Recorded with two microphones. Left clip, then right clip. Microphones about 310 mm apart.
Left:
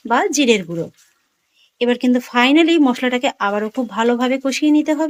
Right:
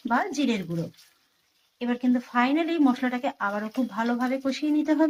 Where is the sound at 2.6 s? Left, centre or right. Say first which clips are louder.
Left 10 dB; left.